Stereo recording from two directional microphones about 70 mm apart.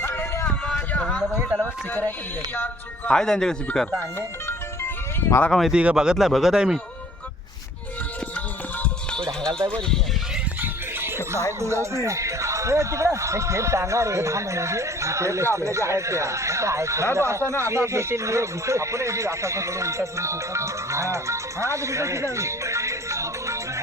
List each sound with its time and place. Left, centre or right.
0.0 s a sound: left
1.2 s a sound: centre
1.6 s speech: left
3.1 s speech: centre
5.5 s speech: centre
5.7 s speech: centre
9.1 s music: centre
9.6 s speech: centre
11.6 s speech: right